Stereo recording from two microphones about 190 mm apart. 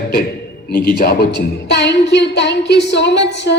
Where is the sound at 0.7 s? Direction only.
50° left (ahead or behind).